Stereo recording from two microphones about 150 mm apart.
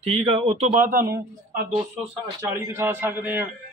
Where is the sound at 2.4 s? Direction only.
20° right (ahead or behind).